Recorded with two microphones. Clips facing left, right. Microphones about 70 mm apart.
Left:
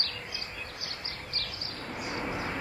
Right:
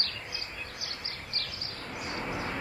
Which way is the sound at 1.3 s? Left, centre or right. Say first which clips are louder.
Left 1 dB; left.